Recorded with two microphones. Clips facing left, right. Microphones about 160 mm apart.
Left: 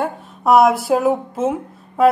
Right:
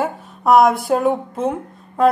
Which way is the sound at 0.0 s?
Centre (ahead or behind).